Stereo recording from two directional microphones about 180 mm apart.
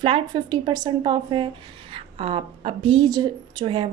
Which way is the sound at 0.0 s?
25° right (ahead or behind).